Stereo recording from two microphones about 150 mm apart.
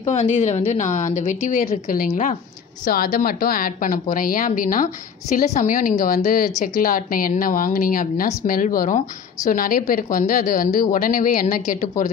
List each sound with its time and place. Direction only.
0.0 s a woman's voice: 45° left (ahead or behind)
2.8 s a woman's voice: 70° left (ahead or behind); by 9.0 s 55° left (ahead or behind)
9.5 s a woman's voice: 65° left (ahead or behind)